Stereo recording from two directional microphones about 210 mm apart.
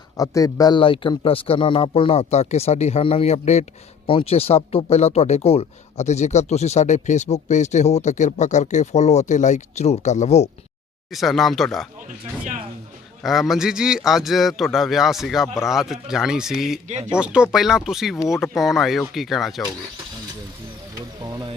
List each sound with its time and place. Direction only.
0.2 s a man's voice: 15° left (ahead or behind); by 10.5 s 30° left (ahead or behind)
11.1 s a man's voice: centre (ahead or behind)
13.2 s a man's voice: centre (ahead or behind)
21.2 s music: 20° right (ahead or behind)